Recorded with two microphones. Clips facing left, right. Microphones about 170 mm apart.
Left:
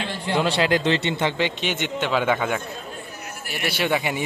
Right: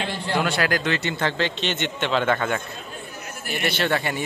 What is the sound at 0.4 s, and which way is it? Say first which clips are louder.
A man's voice: left 3 dB; 25° left (ahead or behind).